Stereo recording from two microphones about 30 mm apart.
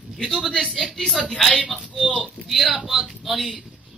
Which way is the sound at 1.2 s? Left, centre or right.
Left.